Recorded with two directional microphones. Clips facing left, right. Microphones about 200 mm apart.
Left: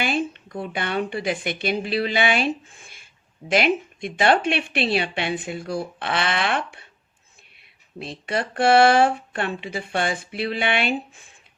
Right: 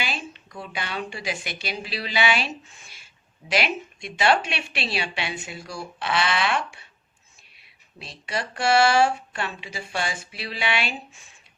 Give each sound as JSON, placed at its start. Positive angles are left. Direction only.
{"t": 0.0, "sound": "a woman's voice", "side_deg": 55}